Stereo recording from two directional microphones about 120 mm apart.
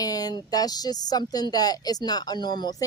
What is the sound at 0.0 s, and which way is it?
A woman's voice, 30° left (ahead or behind).